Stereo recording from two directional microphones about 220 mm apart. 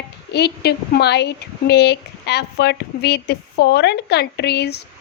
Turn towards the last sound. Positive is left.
turn(degrees=50)  # may be behind; listen again after turning